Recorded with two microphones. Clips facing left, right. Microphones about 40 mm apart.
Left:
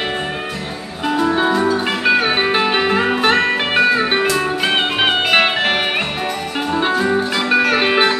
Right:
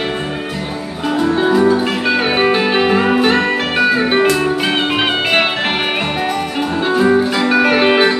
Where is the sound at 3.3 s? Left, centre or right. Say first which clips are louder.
Even; centre.